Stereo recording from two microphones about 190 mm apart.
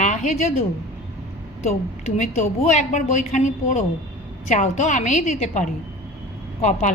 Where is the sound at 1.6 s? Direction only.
35° left (ahead or behind).